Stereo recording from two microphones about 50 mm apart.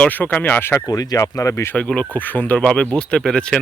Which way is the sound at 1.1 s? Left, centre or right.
Left.